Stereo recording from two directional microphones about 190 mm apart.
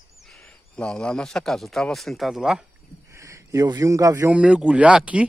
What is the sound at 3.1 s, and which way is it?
A man's voice, 15° right (ahead or behind).